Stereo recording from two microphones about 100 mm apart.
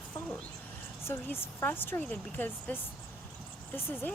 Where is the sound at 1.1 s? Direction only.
20° left (ahead or behind).